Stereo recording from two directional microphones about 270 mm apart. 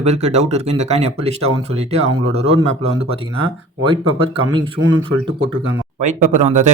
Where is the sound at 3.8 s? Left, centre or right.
Centre.